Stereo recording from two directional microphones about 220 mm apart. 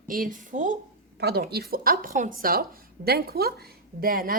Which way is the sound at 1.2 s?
45° right (ahead or behind).